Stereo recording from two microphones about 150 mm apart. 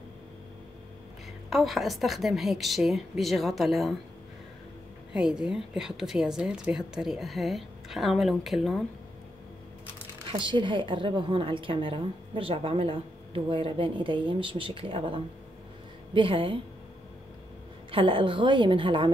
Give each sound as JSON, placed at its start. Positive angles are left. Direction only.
{"t": 1.5, "sound": "a woman's voice", "side_deg": 0}
{"t": 5.1, "sound": "a woman's voice", "side_deg": -5}
{"t": 10.3, "sound": "a woman's voice", "side_deg": -30}
{"t": 17.9, "sound": "a woman's voice", "side_deg": -35}